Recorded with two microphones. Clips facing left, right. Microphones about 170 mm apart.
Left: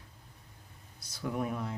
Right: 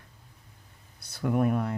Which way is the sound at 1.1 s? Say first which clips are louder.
Right 8 dB; 60° right (ahead or behind).